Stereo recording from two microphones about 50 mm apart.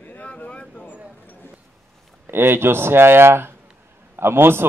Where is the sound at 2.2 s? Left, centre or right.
Right.